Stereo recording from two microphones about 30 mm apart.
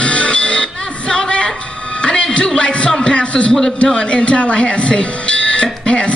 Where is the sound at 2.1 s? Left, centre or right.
Left.